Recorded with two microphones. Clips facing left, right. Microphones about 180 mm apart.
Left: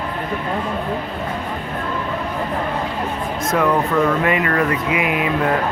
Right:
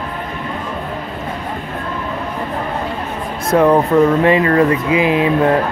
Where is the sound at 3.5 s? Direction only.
30° right (ahead or behind).